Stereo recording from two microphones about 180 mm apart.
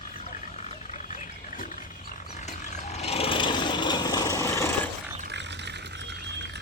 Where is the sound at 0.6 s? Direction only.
45° left (ahead or behind).